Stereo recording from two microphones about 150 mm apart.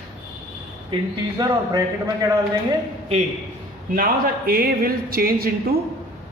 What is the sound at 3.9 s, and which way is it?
A man's voice, 70° right (ahead or behind).